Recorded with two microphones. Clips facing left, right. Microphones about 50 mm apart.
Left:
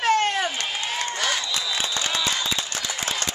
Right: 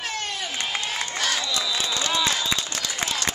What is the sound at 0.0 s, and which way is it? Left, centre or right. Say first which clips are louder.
Crowd: left 10 dB; left.